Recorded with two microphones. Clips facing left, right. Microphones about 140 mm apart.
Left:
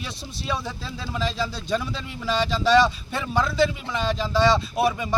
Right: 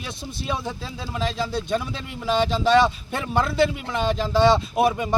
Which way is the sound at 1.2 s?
55° right (ahead or behind).